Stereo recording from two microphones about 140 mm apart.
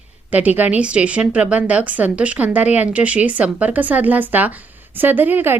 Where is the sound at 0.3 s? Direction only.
10° right (ahead or behind).